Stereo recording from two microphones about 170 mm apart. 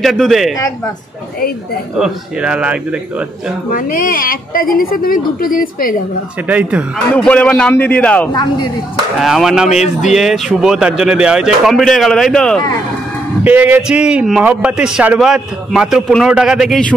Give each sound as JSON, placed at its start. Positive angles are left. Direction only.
{"t": 0.0, "sound": "speech", "side_deg": 0}
{"t": 2.0, "sound": "speech", "side_deg": -5}
{"t": 3.7, "sound": "a woman's voice", "side_deg": 55}
{"t": 6.4, "sound": "speech", "side_deg": -10}
{"t": 7.2, "sound": "a man's voice", "side_deg": 5}
{"t": 8.3, "sound": "speech", "side_deg": 25}
{"t": 9.2, "sound": "speech", "side_deg": 0}
{"t": 13.4, "sound": "speech", "side_deg": -10}